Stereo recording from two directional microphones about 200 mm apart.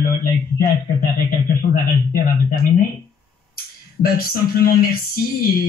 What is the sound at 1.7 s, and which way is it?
A man's voice, 45° left (ahead or behind).